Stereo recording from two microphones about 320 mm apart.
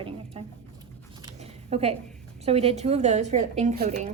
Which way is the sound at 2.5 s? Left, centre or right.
Centre.